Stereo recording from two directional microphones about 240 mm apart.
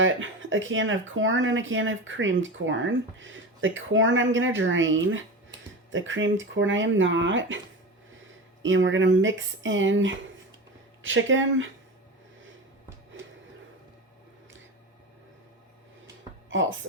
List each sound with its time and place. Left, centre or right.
0.0 s speech: right
8.6 s speech: right
16.5 s a woman's voice: right